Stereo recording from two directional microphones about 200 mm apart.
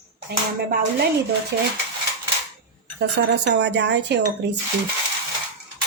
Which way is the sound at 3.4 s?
60° right (ahead or behind).